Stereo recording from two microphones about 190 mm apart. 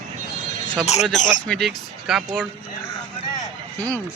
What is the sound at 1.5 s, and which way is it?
Speech, centre (ahead or behind).